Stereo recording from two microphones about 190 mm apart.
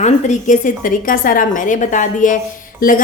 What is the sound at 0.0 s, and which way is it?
Speech, 40° left (ahead or behind).